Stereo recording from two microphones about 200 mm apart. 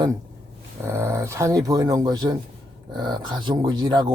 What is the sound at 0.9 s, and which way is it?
Speech, 10° right (ahead or behind).